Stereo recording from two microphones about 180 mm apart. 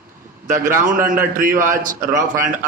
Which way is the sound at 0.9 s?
50° right (ahead or behind).